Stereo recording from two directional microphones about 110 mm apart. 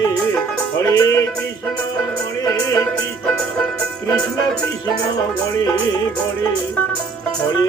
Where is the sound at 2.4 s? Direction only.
30° left (ahead or behind).